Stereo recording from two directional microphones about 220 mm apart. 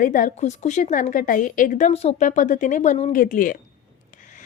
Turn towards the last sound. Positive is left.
turn(degrees=40)  # may be behind; listen again after turning